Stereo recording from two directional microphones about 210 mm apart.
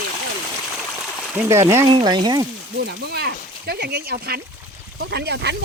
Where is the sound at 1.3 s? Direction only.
10° right (ahead or behind).